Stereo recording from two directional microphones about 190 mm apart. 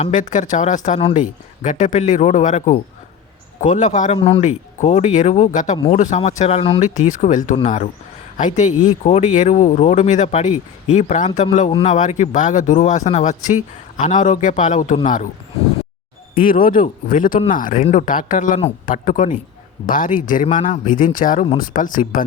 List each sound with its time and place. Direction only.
0.0 s speech: 40° left (ahead or behind)
16.3 s speech: 45° left (ahead or behind)